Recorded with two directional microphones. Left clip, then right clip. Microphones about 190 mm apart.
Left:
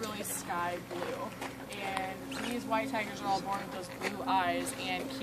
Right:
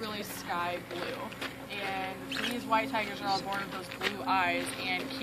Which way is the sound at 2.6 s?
10° left (ahead or behind).